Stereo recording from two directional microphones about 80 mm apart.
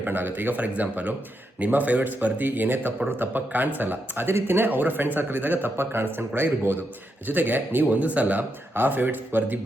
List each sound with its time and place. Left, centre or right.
0.0 s a man's voice: right